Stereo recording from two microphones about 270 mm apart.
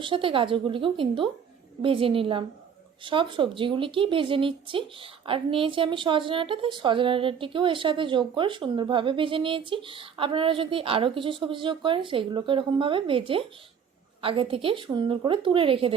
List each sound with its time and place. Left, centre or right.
0.0 s a woman's voice: centre